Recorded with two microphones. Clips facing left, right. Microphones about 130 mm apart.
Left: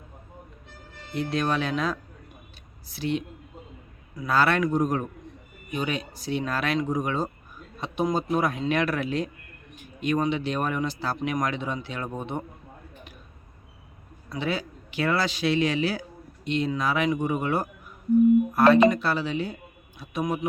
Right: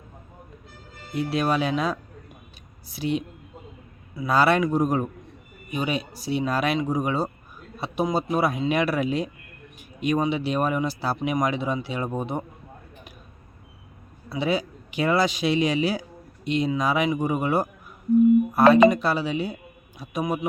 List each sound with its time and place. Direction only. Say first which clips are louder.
1.1 s speech: right 2 dB; 10° right (ahead or behind)
14.3 s speech: right 4 dB; 10° right (ahead or behind)
18.7 s speech: right 3 dB; 15° right (ahead or behind)